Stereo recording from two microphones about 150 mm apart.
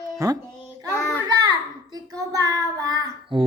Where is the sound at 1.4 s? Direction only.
25° right (ahead or behind).